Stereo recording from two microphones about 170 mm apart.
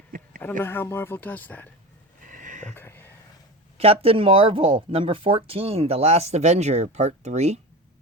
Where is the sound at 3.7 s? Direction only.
35° right (ahead or behind).